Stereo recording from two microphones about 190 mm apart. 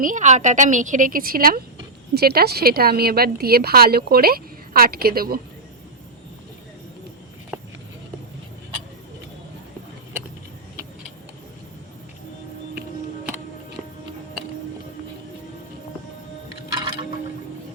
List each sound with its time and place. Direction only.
0.0 s a woman's voice: 40° right (ahead or behind)